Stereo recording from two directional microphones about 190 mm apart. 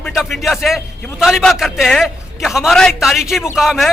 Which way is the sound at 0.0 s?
Centre (ahead or behind).